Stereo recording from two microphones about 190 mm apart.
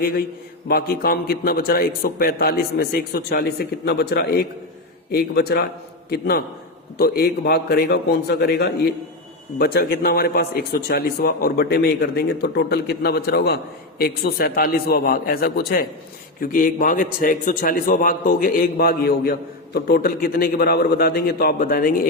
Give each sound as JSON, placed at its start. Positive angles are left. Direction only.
{"t": 0.7, "sound": "a man's voice", "side_deg": 55}